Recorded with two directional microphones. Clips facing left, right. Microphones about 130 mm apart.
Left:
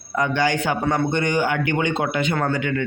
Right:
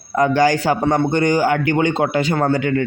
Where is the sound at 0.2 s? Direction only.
40° right (ahead or behind).